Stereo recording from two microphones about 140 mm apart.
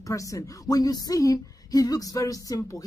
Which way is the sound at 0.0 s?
25° left (ahead or behind).